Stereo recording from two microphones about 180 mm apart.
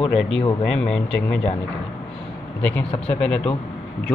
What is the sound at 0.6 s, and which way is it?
Speech, 5° left (ahead or behind).